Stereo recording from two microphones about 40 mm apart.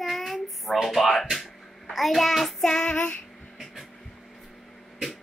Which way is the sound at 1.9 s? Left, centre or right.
Centre.